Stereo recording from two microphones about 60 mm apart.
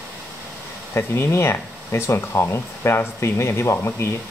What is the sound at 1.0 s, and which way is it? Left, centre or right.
Speech, left.